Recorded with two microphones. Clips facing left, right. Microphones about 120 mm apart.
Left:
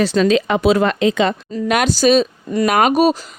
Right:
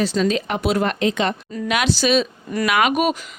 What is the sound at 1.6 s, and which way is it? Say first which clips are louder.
Speech: left 5 dB; 45° left (ahead or behind).